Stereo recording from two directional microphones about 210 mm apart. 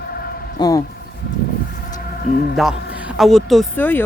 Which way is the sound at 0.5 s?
20° left (ahead or behind).